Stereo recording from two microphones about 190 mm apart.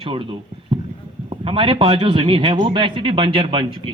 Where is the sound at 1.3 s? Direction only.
30° right (ahead or behind).